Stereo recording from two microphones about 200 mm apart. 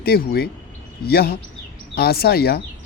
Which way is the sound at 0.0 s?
50° left (ahead or behind).